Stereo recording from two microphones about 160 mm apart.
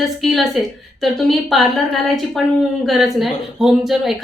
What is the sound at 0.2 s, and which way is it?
A woman's voice, centre (ahead or behind).